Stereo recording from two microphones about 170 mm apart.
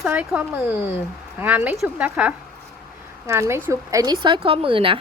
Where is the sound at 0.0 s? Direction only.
5° right (ahead or behind).